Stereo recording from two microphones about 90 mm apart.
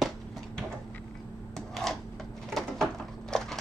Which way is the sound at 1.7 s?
5° left (ahead or behind).